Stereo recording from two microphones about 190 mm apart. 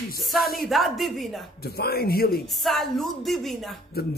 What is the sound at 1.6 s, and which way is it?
Speech, 55° left (ahead or behind).